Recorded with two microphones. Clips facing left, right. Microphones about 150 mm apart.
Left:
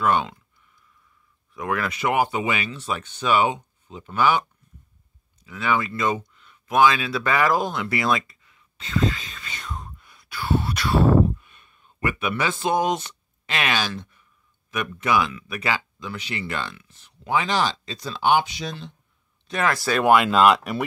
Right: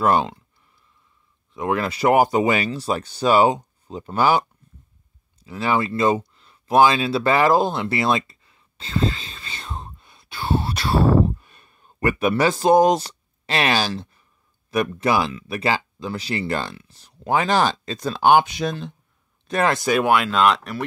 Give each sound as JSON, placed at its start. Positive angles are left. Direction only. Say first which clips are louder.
{"t": 0.0, "sound": "speech", "louder": "right 3 dB", "side_deg": -35}
{"t": 1.5, "sound": "speech", "louder": "right 4 dB", "side_deg": -25}
{"t": 5.4, "sound": "a sound", "louder": "right 2 dB", "side_deg": -35}
{"t": 14.7, "sound": "speech", "louder": "right 3 dB", "side_deg": -35}
{"t": 19.6, "sound": "speech", "louder": "right 3 dB", "side_deg": -25}
{"t": 20.1, "sound": "speech", "louder": "left 4 dB", "side_deg": 0}